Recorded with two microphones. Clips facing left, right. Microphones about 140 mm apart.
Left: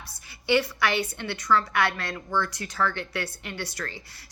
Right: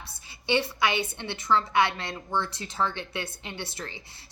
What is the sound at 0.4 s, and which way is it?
A woman's voice, 25° right (ahead or behind).